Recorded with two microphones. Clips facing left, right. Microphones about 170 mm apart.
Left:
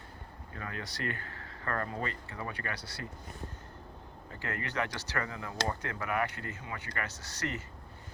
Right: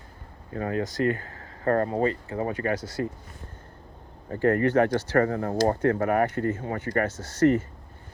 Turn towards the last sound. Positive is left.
turn(degrees=-50)  # may be behind; listen again after turning